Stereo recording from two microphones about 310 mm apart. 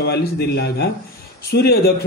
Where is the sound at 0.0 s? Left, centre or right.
Left.